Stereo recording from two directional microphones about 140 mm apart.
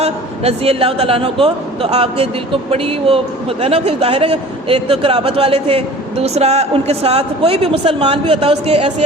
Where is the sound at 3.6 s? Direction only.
45° right (ahead or behind).